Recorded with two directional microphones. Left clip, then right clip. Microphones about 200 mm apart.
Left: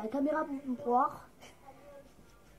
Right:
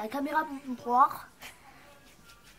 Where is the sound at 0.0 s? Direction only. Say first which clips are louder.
Right 2 dB; 20° right (ahead or behind).